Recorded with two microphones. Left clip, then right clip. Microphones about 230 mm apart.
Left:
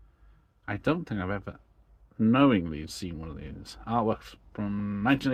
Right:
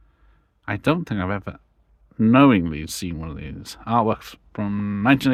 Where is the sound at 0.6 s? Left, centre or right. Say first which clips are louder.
Right 7 dB; right.